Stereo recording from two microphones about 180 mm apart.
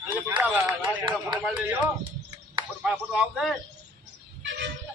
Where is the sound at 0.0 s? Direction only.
10° right (ahead or behind).